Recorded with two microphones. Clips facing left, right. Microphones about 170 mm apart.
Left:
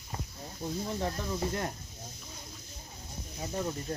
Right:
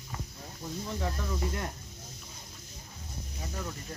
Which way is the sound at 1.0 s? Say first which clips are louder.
Right 1 dB; 35° left (ahead or behind).